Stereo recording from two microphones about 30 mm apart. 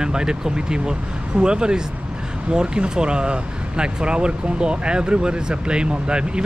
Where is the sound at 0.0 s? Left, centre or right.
Right.